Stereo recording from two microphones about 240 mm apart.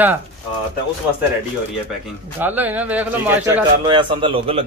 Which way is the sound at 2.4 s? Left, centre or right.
Centre.